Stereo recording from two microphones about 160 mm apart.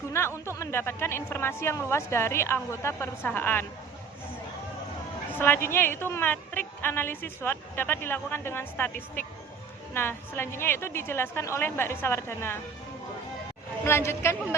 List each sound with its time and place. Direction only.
0.1 s a woman's voice: 15° left (ahead or behind)
5.3 s a woman's voice: 15° left (ahead or behind)
13.8 s a woman's voice: 15° left (ahead or behind)